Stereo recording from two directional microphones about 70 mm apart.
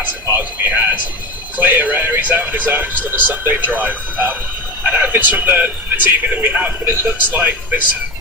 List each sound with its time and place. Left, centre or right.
0.0 s speech: right